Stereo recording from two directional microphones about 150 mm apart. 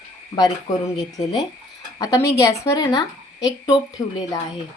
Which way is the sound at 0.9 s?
25° left (ahead or behind).